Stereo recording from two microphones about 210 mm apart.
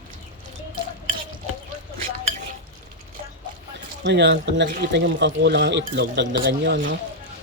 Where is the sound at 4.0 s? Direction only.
55° right (ahead or behind).